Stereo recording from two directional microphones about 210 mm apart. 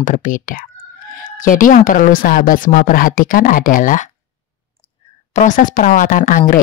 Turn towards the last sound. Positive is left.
turn(degrees=40)  # may be behind; listen again after turning